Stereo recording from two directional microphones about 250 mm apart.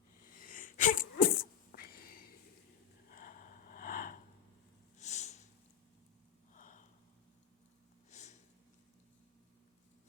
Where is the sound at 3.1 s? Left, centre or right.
Left.